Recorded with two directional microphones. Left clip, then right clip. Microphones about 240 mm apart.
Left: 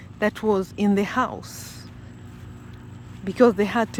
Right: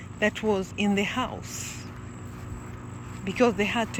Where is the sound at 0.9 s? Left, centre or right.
Centre.